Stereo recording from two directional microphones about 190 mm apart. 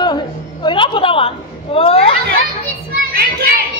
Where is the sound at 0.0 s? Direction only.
20° left (ahead or behind).